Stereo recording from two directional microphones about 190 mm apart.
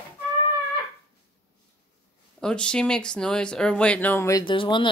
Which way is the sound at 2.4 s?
5° left (ahead or behind).